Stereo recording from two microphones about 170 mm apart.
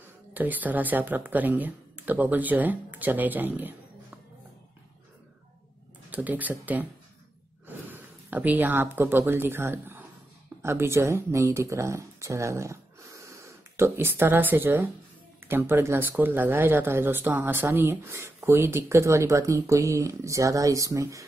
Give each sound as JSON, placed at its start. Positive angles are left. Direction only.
{"t": 0.3, "sound": "speech", "side_deg": -10}
{"t": 6.0, "sound": "speech", "side_deg": -10}